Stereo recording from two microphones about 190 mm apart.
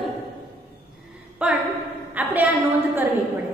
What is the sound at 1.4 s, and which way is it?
Speech, 5° right (ahead or behind).